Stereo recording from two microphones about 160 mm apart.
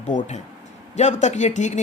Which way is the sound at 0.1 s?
45° left (ahead or behind).